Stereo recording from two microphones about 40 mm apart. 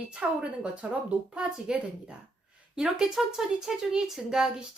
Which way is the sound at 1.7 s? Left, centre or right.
Centre.